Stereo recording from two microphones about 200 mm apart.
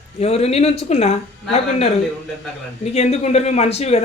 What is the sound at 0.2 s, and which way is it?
Speech, 30° left (ahead or behind).